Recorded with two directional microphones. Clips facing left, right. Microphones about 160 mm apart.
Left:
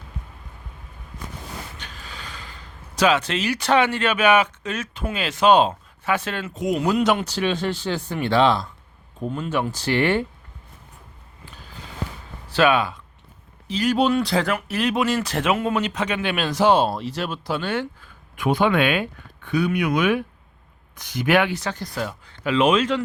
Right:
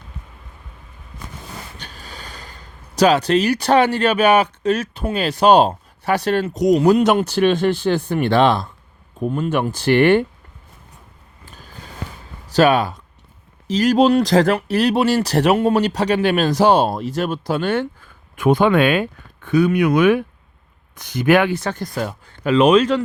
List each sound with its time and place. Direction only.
1.8 s speech: 35° right (ahead or behind); by 10.2 s 60° right (ahead or behind)
11.4 s a sound: 45° right (ahead or behind)
12.5 s speech: 40° right (ahead or behind)